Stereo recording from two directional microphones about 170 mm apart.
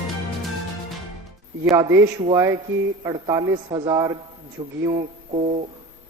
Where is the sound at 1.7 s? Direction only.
15° right (ahead or behind).